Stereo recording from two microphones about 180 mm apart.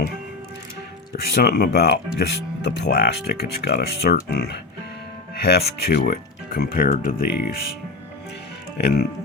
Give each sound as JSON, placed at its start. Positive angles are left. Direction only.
{"t": 1.1, "sound": "speech", "side_deg": 65}
{"t": 8.8, "sound": "speech", "side_deg": 65}